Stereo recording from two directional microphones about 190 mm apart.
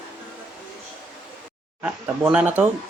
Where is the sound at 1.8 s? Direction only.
10° right (ahead or behind).